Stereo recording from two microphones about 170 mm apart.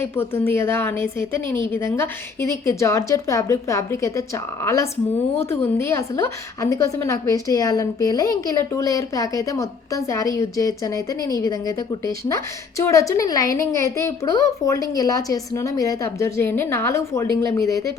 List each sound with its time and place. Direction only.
0.0 s a woman's voice: 15° left (ahead or behind)